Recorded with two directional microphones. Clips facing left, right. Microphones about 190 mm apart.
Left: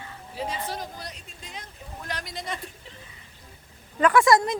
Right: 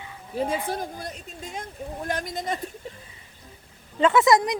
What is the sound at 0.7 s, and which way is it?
Speech, 50° right (ahead or behind).